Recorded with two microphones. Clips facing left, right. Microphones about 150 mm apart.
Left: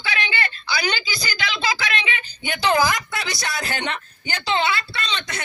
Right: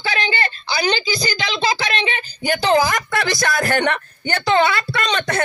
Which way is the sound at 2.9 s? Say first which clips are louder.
Right 7 dB; 50° right (ahead or behind).